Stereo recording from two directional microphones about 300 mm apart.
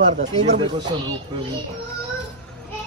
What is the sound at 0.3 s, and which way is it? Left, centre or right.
Speech, centre.